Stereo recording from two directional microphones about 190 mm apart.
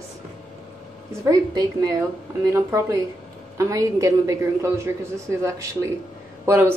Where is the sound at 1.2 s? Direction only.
20° right (ahead or behind).